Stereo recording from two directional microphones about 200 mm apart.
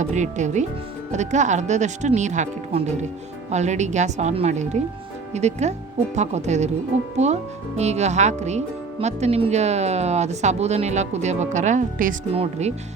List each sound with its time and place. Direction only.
0.0 s speech: 35° right (ahead or behind)